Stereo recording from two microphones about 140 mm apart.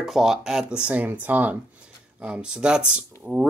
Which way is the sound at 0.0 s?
5° right (ahead or behind).